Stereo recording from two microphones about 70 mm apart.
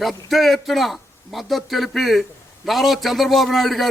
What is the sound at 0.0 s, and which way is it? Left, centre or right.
A man's voice, centre.